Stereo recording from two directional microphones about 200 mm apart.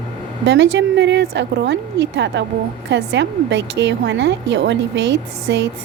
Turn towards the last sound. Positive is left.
turn(degrees=-60)  # may be behind; listen again after turning